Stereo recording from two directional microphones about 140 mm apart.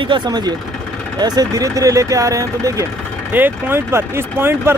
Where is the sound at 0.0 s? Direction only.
35° right (ahead or behind).